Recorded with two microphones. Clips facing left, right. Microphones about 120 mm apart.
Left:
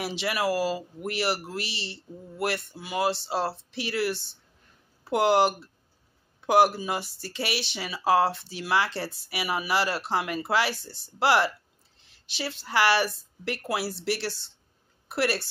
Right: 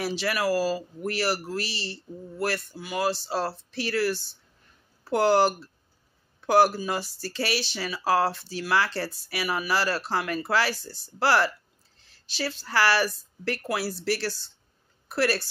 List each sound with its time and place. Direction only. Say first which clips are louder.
0.0 s speech: right 1 dB; 20° left (ahead or behind)